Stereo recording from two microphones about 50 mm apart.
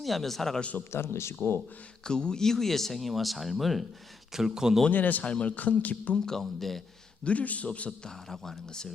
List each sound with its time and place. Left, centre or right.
0.0 s speech: centre
0.6 s a man's voice: left
0.9 s speech: left
2.0 s speech: centre
4.9 s speech: left
6.1 s speech: centre
7.3 s a man's voice: left
8.3 s speech: centre